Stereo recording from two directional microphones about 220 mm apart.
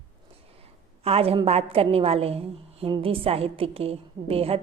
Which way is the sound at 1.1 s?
25° right (ahead or behind).